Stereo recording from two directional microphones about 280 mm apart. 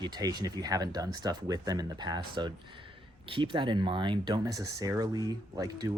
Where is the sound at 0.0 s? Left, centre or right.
Centre.